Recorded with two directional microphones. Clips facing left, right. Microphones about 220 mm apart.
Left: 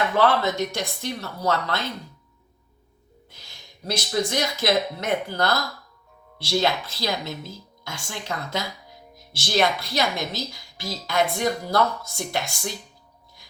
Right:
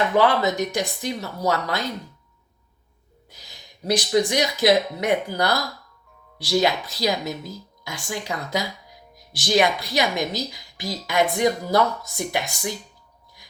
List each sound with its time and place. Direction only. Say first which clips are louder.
0.2 s a woman's voice: right 1 dB; 15° right (ahead or behind)
3.4 s a woman's voice: right 5 dB; 15° right (ahead or behind)
7.3 s a woman's voice: right 4 dB; 40° right (ahead or behind)
7.9 s a woman's voice: right 3 dB; 15° right (ahead or behind)